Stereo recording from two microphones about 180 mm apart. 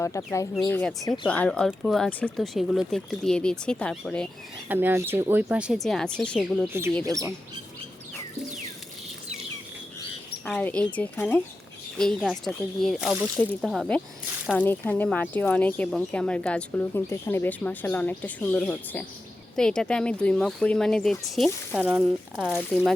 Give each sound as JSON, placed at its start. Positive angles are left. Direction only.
{"t": 0.0, "sound": "speech", "side_deg": 15}
{"t": 4.7, "sound": "speech", "side_deg": -10}
{"t": 7.0, "sound": "speech", "side_deg": -20}
{"t": 10.4, "sound": "speech", "side_deg": 5}
{"t": 13.4, "sound": "speech", "side_deg": 5}